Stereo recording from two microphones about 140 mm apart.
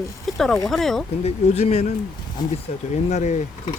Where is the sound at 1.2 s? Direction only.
50° left (ahead or behind).